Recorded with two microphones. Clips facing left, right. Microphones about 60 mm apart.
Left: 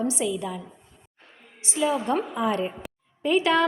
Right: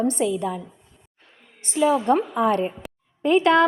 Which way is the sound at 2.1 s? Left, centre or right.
Right.